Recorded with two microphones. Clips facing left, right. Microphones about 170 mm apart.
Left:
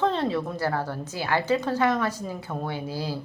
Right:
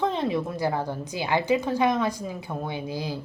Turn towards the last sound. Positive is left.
turn(degrees=-15)  # may be behind; listen again after turning